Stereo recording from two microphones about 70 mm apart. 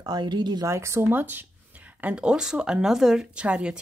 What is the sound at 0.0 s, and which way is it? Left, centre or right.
Speech, right.